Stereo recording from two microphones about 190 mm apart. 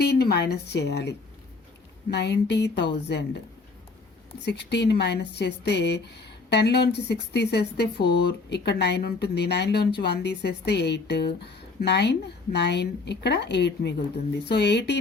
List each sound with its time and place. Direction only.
0.0 s speech: 55° left (ahead or behind)
4.4 s speech: 60° left (ahead or behind)